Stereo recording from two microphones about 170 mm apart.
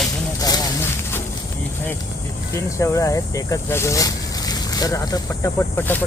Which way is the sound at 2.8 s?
20° left (ahead or behind).